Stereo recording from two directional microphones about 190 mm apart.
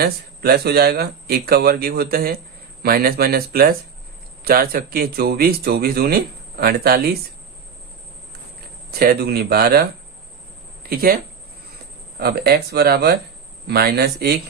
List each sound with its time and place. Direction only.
0.0 s speech: 55° right (ahead or behind)
8.9 s speech: 50° right (ahead or behind)
10.8 s speech: 50° right (ahead or behind)
12.2 s speech: 55° right (ahead or behind)